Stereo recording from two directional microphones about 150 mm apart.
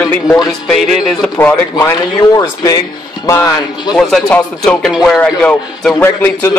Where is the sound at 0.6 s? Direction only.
Centre (ahead or behind).